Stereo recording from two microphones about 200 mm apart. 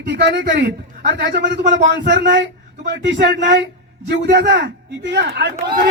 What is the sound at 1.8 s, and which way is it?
A man's voice, 55° right (ahead or behind).